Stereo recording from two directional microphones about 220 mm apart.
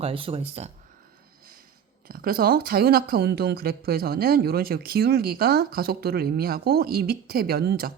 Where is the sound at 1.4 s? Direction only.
40° right (ahead or behind).